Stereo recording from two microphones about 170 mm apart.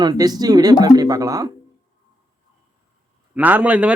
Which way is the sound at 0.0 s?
25° right (ahead or behind).